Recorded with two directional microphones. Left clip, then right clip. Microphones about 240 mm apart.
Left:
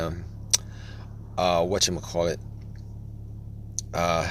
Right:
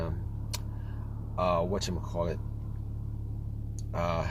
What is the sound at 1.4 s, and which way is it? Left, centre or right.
Speech, left.